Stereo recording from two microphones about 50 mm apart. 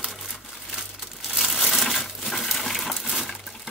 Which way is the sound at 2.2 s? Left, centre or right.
Centre.